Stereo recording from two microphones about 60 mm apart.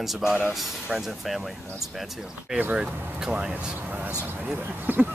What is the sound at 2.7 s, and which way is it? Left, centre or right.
Speech, centre.